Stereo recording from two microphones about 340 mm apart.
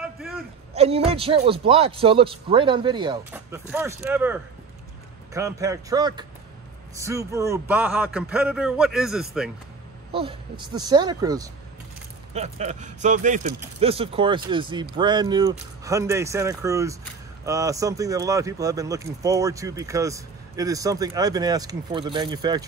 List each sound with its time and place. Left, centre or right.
0.0 s a sound: centre
0.7 s a man's voice: centre
10.1 s speech: centre